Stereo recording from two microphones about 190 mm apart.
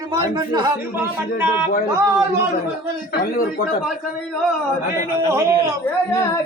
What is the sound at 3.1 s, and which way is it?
Speech, 50° left (ahead or behind).